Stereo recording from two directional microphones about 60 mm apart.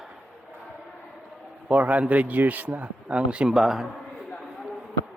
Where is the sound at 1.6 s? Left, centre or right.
Right.